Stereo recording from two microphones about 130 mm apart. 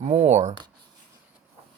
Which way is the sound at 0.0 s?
60° right (ahead or behind).